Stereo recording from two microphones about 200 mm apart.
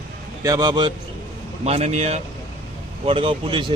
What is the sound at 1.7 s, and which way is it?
Speech, 30° right (ahead or behind).